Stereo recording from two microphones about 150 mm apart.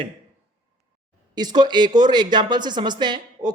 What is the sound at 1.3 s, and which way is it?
Speech, 25° right (ahead or behind).